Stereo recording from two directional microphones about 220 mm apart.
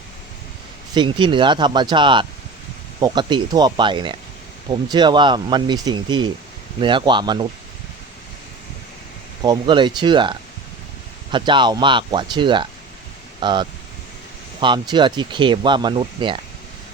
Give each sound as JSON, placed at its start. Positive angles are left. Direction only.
{"t": 0.9, "sound": "speech", "side_deg": -20}
{"t": 9.4, "sound": "speech", "side_deg": -20}